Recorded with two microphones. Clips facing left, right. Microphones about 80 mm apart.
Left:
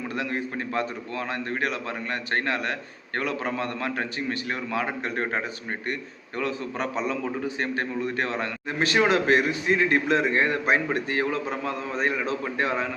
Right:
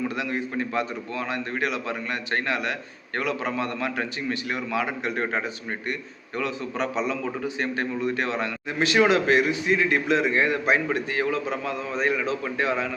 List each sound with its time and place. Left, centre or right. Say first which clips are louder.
0.2 s a man's voice: right 2 dB; left